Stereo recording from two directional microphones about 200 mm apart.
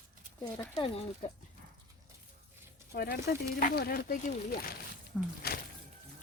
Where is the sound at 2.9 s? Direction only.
50° left (ahead or behind).